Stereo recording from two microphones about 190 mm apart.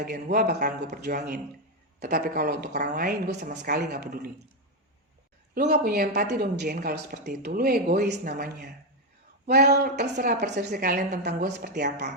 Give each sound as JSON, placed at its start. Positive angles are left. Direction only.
{"t": 0.0, "sound": "speech", "side_deg": -55}
{"t": 5.5, "sound": "speech", "side_deg": -55}